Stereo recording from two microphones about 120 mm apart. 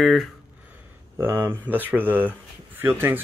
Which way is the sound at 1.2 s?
20° right (ahead or behind).